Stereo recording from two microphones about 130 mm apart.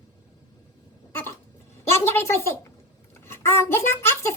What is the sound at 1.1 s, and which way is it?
Cough, 20° left (ahead or behind).